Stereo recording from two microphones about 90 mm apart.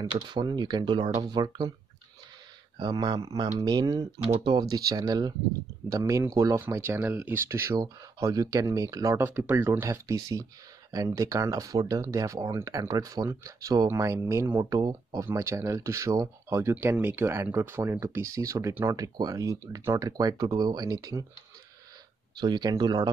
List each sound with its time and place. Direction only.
0.3 s speech: 55° right (ahead or behind)
1.2 s speech: 50° right (ahead or behind)
2.8 s speech: 50° right (ahead or behind)
4.2 s speech: 65° right (ahead or behind)
4.6 s speech: 45° right (ahead or behind)
5.9 s speech: 40° right (ahead or behind)
7.7 s speech: 45° right (ahead or behind)
9.2 s speech: 25° right (ahead or behind)
14.6 s speech: 45° right (ahead or behind)
15.2 s speech: 35° right (ahead or behind)
22.4 s speech: 50° right (ahead or behind)